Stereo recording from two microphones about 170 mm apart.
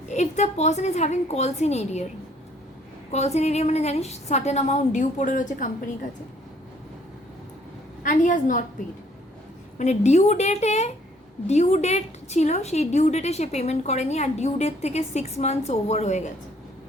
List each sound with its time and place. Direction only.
0.1 s a woman's voice: 45° left (ahead or behind)
3.1 s a woman's voice: 40° left (ahead or behind)
8.0 s a woman's voice: 45° left (ahead or behind)
9.7 s a woman's voice: 40° left (ahead or behind)